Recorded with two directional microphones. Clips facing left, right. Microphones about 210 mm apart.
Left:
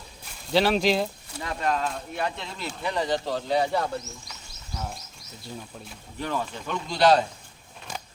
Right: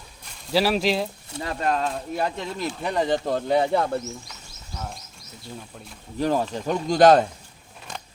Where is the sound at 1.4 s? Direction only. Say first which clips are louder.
Right 2 dB; 35° right (ahead or behind); by 4.0 s 55° right (ahead or behind).